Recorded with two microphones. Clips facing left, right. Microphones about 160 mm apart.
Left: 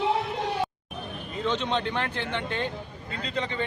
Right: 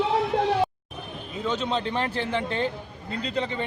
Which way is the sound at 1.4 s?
5° right (ahead or behind).